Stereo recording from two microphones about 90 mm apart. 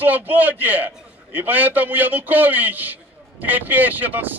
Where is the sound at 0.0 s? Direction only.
20° right (ahead or behind).